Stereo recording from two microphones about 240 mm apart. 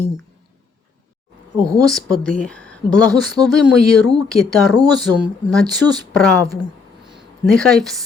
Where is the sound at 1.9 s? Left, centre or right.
Centre.